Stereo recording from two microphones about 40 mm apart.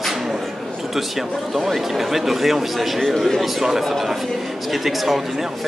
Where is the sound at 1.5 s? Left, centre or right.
Centre.